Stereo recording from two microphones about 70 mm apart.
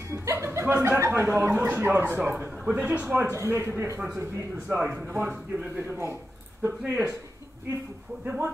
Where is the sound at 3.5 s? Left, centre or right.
Right; by 5.7 s centre.